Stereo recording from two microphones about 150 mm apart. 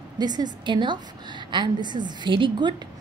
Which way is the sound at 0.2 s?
30° right (ahead or behind).